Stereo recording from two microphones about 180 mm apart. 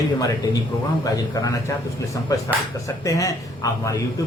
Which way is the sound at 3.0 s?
20° left (ahead or behind).